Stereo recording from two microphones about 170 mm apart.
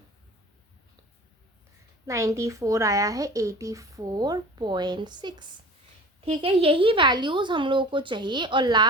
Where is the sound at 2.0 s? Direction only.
20° right (ahead or behind).